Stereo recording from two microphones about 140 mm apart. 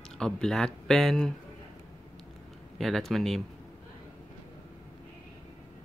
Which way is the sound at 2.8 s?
Centre (ahead or behind).